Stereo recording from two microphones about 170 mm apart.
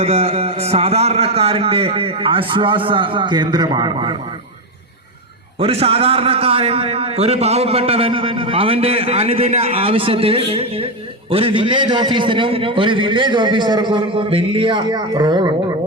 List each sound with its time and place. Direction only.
0.0 s a man's voice: 35° right (ahead or behind)
5.5 s a man's voice: 35° right (ahead or behind)